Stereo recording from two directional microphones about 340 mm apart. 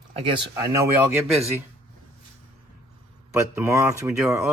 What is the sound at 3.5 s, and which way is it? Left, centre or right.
Speech, centre.